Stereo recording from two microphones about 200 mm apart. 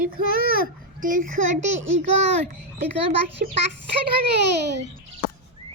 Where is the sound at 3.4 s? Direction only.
45° right (ahead or behind).